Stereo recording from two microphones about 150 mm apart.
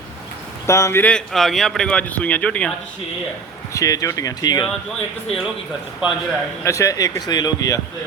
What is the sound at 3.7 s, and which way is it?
Speech, 20° left (ahead or behind).